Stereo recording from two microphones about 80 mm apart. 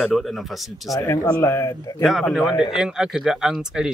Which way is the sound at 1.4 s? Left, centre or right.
Left.